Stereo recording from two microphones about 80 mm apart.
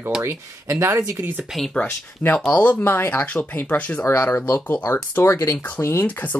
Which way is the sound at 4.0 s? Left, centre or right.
Left.